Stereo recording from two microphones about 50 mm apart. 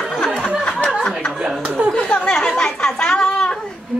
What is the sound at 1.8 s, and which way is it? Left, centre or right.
Chuckle, right.